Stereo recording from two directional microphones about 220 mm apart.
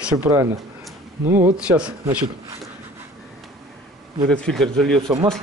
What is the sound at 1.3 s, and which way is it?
Speech, 10° right (ahead or behind).